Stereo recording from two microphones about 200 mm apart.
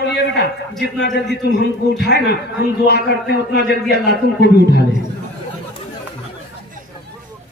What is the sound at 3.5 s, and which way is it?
A man's voice, 55° left (ahead or behind).